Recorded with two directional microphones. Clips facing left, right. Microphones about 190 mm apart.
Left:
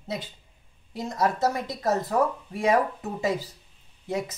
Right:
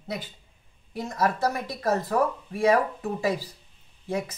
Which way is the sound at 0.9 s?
20° left (ahead or behind).